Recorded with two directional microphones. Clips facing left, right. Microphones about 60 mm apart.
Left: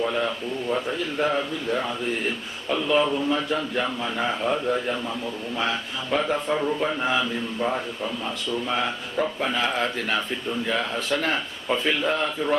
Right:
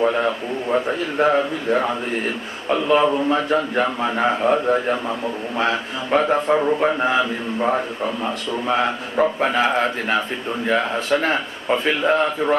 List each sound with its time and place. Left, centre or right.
0.0 s a man's voice: right
6.1 s a man's voice: right
8.6 s a man's voice: right